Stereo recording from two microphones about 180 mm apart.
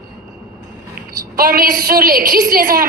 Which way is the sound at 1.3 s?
55° right (ahead or behind).